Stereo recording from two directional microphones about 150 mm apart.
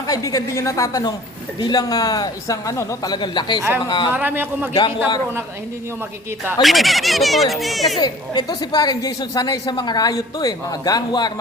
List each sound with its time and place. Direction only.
0.1 s speech: 25° left (ahead or behind)
4.1 s speech: 15° right (ahead or behind)
6.6 s speech: centre (ahead or behind)
7.9 s speech: 30° left (ahead or behind)